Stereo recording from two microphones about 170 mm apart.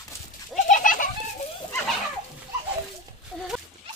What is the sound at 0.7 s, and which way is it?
Bird, 50° left (ahead or behind).